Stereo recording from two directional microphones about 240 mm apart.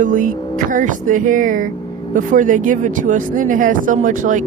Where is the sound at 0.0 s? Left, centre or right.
Right.